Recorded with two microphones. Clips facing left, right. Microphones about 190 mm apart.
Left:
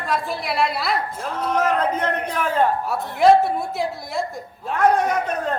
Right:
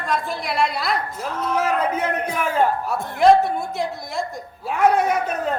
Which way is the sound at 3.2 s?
Centre (ahead or behind).